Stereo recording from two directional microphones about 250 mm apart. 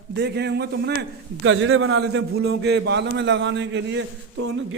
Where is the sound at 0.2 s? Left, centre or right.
Right.